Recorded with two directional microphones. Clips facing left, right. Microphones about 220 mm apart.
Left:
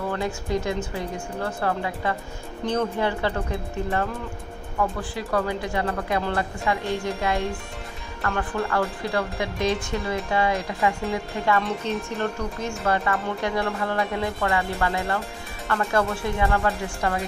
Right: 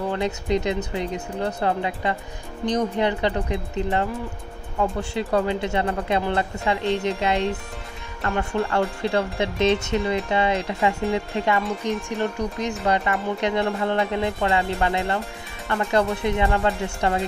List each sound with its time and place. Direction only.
0.1 s speech: 20° right (ahead or behind)